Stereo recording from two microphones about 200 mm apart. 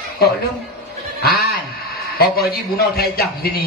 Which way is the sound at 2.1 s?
50° left (ahead or behind).